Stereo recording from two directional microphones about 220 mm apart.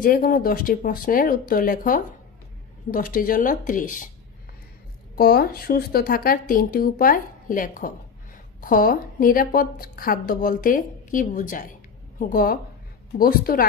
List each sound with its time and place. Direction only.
0.0 s a woman's voice: 40° left (ahead or behind)
5.1 s a woman's voice: 45° left (ahead or behind)